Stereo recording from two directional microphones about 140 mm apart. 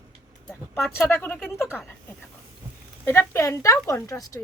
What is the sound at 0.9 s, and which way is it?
Speech, 15° left (ahead or behind).